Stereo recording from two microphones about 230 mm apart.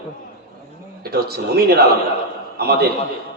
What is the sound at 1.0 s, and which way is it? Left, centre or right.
A man's voice, right.